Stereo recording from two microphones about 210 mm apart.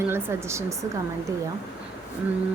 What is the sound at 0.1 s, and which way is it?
Speech, 10° right (ahead or behind).